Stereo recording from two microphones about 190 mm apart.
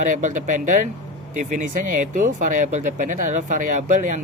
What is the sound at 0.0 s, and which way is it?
Speech, 40° right (ahead or behind).